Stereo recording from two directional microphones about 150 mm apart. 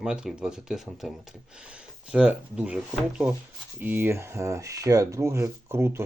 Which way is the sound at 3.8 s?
15° right (ahead or behind).